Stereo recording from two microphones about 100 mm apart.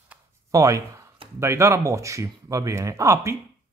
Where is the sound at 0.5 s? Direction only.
30° right (ahead or behind).